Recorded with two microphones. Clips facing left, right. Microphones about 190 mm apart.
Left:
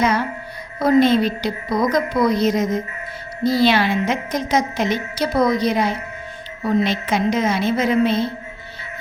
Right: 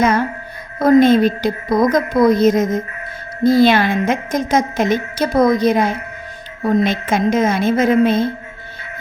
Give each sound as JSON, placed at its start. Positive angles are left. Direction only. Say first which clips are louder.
{"t": 0.0, "sound": "a woman's voice", "louder": "right 4 dB", "side_deg": -50}